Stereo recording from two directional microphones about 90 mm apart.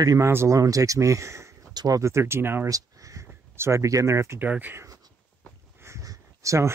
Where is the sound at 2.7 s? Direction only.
35° right (ahead or behind).